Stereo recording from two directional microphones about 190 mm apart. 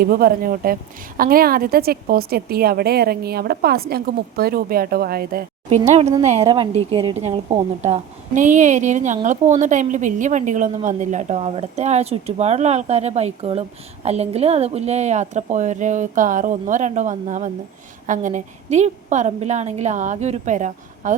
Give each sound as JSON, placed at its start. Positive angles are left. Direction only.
{"t": 0.0, "sound": "a woman's voice", "side_deg": -50}
{"t": 5.9, "sound": "speech", "side_deg": -35}